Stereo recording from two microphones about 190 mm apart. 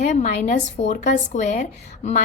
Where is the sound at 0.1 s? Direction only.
40° left (ahead or behind).